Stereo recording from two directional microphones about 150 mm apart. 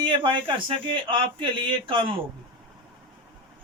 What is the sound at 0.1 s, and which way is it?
A man's voice, 35° right (ahead or behind).